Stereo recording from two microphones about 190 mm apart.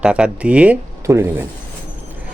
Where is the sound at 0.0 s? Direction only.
5° right (ahead or behind).